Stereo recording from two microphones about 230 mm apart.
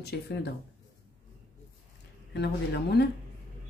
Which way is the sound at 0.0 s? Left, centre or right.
Left.